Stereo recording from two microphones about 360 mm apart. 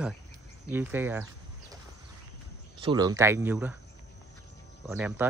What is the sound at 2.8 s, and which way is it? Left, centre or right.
Speech, centre.